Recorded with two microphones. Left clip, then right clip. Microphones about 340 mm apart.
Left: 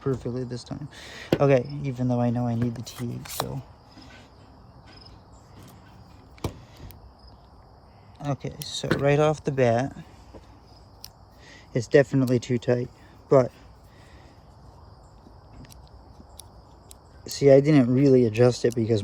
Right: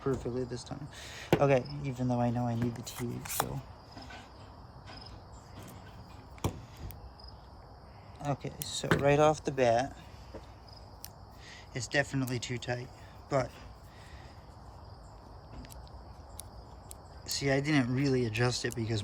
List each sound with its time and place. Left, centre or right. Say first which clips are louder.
0.2 s speech: left 4 dB; centre
2.9 s speech: left 3 dB; centre
6.4 s a sound: left 3 dB; centre
8.2 s speech: left 4 dB; centre
11.4 s speech: left 11 dB; centre
17.2 s speech: left 14 dB; centre